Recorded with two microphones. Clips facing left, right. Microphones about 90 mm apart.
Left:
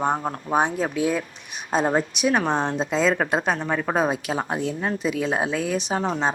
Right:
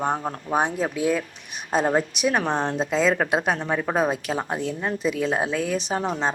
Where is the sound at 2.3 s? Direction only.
25° left (ahead or behind).